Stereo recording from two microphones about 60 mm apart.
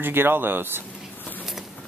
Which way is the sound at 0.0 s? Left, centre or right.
Right.